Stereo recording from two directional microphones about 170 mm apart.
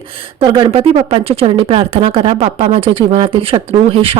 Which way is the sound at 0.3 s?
30° right (ahead or behind).